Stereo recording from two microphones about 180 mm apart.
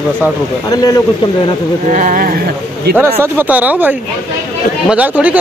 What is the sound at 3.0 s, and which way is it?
Speech, 10° right (ahead or behind).